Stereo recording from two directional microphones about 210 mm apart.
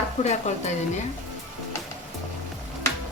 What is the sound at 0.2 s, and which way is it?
Speech, 35° left (ahead or behind).